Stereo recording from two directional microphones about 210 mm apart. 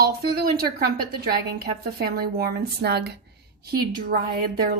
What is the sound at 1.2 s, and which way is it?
A woman's voice, 45° right (ahead or behind).